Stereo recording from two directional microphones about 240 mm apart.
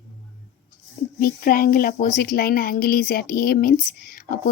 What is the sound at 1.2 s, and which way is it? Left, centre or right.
Speech, left.